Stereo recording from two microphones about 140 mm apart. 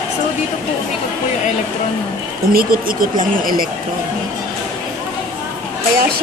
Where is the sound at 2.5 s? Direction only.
90° right.